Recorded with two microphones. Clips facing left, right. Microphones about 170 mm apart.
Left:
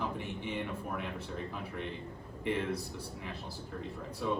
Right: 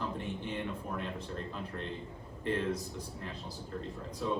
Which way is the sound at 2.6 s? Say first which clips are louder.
Right 1 dB; 65° left (ahead or behind).